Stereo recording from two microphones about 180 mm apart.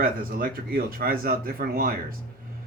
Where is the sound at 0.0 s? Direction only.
60° right (ahead or behind).